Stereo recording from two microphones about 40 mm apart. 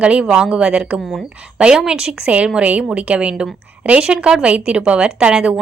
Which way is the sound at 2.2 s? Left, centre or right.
Right.